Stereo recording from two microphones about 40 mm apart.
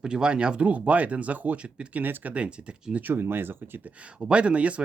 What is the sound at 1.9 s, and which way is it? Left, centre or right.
Speech, right.